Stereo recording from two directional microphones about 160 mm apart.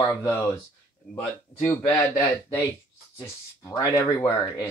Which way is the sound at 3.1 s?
25° left (ahead or behind).